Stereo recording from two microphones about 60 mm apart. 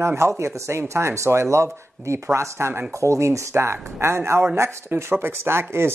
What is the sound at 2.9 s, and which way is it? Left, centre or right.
Speech, right.